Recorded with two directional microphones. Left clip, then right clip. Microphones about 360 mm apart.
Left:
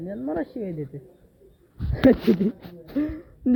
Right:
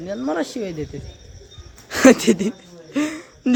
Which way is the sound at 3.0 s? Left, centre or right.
Centre.